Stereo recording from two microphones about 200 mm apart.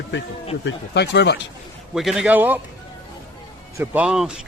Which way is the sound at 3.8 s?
5° right (ahead or behind).